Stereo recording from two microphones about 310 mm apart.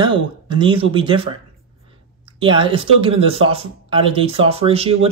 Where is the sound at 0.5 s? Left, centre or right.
Centre.